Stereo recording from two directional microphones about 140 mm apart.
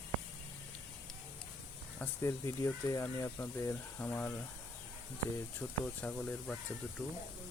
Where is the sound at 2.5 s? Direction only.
25° left (ahead or behind).